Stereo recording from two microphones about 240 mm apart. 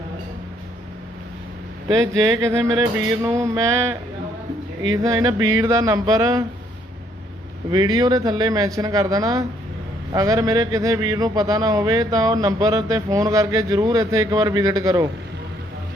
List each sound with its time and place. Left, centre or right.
2.2 s speech: centre
5.0 s speech: centre
7.7 s speech: centre